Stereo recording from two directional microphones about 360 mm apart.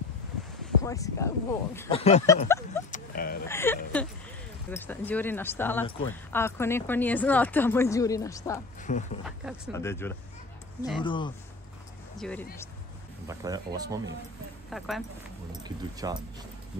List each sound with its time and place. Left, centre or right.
0.8 s speech: centre
2.9 s a sound: left
3.4 s speech: centre
8.8 s speech: left
9.2 s speech: centre
13.3 s speech: centre
15.6 s speech: centre